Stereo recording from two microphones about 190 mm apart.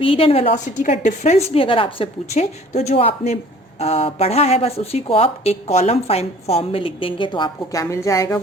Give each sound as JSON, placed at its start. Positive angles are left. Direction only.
{"t": 0.0, "sound": "speech", "side_deg": 30}
{"t": 1.5, "sound": "speech", "side_deg": 30}